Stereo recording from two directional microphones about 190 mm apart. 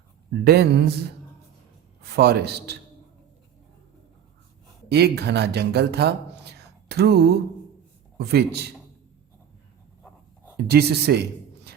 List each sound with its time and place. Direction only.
0.4 s a man's voice: 60° right (ahead or behind)
2.0 s a man's voice: 60° right (ahead or behind)
4.9 s a man's voice: 60° right (ahead or behind)
10.7 s a man's voice: 60° right (ahead or behind)